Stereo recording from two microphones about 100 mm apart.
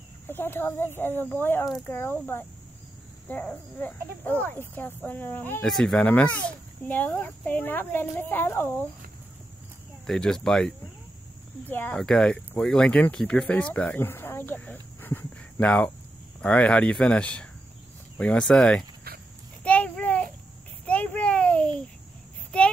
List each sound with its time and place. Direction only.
0.3 s speech: 20° left (ahead or behind)
10.0 s speech: 5° left (ahead or behind)
11.7 s speech: 20° left (ahead or behind)
12.0 s speech: 5° left (ahead or behind)
19.6 s a sound: 15° left (ahead or behind)